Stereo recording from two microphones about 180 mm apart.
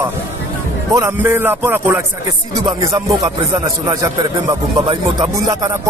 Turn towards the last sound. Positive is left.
turn(degrees=-20)  # may be behind; listen again after turning